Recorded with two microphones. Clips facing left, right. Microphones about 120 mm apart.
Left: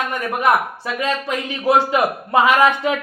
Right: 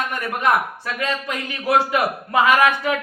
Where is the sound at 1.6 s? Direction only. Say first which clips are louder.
Left 2 dB; 25° left (ahead or behind).